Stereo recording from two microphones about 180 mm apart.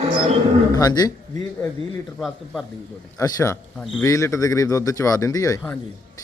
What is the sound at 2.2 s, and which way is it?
Speech, centre (ahead or behind).